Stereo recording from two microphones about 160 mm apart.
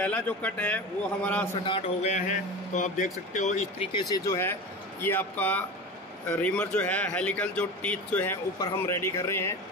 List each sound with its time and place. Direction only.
0.0 s speech: 10° left (ahead or behind)
1.7 s speech: 45° left (ahead or behind)
3.9 s speech: 20° left (ahead or behind)